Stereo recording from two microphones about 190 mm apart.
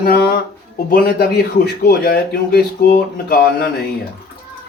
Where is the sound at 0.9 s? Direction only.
50° left (ahead or behind).